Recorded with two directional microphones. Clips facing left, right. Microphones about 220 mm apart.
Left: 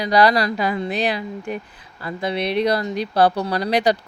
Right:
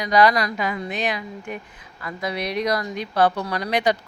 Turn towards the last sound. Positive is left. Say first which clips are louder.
# left 3 dB
turn(degrees=35)  # may be behind; listen again after turning